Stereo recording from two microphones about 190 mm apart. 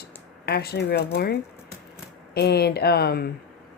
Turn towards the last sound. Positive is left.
turn(degrees=55)  # may be behind; listen again after turning